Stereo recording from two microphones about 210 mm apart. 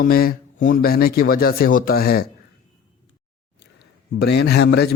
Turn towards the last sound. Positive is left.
turn(degrees=50)  # may be behind; listen again after turning